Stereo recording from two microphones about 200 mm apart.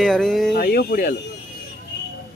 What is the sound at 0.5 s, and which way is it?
Speech, 50° left (ahead or behind).